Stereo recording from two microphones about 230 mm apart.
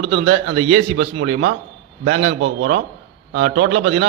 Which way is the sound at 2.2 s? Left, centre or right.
Right.